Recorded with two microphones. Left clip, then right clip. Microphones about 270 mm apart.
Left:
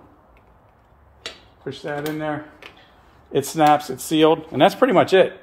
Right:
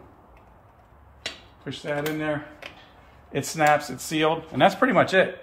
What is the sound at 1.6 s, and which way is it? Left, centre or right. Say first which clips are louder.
A man's voice: left 1 dB; left.